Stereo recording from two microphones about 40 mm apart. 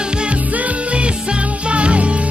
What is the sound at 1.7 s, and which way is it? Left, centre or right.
Music, right.